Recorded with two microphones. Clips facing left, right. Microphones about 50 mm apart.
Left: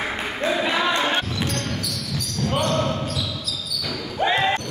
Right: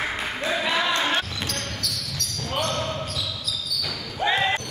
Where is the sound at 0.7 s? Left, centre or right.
Centre.